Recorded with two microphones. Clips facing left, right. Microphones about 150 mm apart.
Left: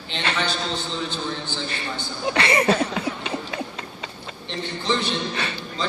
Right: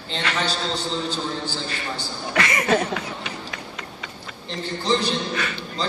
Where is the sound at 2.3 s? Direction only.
30° left (ahead or behind).